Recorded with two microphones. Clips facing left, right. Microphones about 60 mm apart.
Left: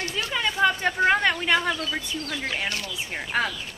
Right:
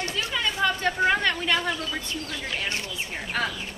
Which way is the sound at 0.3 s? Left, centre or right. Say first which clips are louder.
Left 4 dB; centre.